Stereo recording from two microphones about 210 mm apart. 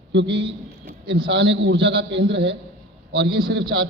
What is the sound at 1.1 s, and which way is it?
A man's voice, 55° right (ahead or behind).